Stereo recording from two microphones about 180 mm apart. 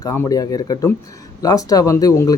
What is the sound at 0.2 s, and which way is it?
Speech, 20° left (ahead or behind).